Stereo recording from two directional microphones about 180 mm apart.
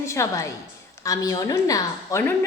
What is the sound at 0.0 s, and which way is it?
A woman's voice, 15° left (ahead or behind).